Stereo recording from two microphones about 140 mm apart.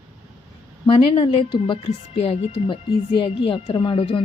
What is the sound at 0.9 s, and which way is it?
A woman's voice, 40° left (ahead or behind).